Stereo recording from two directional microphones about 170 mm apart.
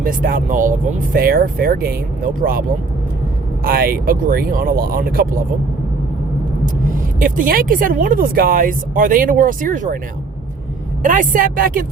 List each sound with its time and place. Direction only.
0.0 s speech: 55° right (ahead or behind)
6.8 s speech: 55° right (ahead or behind)
11.0 s speech: 50° right (ahead or behind)